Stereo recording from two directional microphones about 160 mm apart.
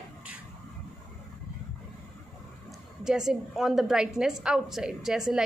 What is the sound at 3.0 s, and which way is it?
A woman's voice, 5° right (ahead or behind).